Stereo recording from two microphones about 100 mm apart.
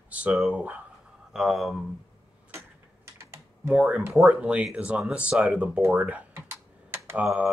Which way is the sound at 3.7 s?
10° right (ahead or behind).